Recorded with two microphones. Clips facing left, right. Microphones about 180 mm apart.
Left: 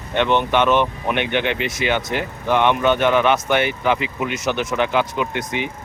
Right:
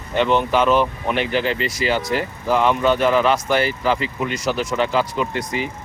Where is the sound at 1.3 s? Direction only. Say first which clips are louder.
Even; 65° left (ahead or behind).